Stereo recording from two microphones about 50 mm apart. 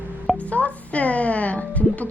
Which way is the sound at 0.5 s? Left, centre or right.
Left.